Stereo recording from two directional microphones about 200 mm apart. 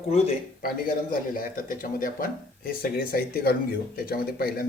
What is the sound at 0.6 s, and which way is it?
Speech, 45° left (ahead or behind).